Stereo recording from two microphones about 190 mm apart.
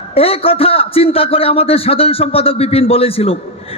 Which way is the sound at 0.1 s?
30° left (ahead or behind).